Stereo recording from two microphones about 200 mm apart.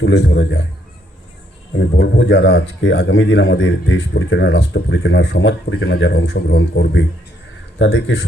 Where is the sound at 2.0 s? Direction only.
65° left (ahead or behind).